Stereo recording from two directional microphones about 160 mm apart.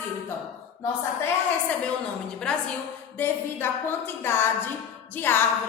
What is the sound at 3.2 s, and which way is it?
A woman's voice, 15° left (ahead or behind).